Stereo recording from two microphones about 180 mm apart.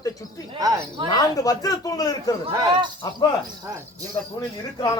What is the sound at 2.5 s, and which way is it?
Speech, 20° right (ahead or behind).